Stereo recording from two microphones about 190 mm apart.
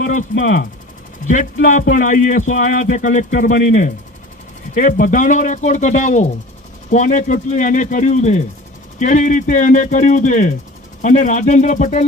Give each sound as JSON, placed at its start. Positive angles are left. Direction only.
{"t": 0.0, "sound": "speech", "side_deg": 45}
{"t": 1.6, "sound": "speech", "side_deg": 45}